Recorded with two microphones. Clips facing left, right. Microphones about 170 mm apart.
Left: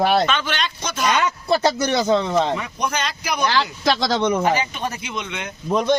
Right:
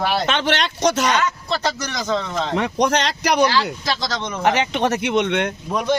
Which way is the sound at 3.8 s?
60° left (ahead or behind).